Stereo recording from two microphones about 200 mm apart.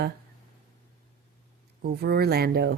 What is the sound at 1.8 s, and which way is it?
Speech, 50° right (ahead or behind).